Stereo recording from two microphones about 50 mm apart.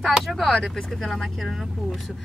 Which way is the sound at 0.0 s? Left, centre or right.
Centre.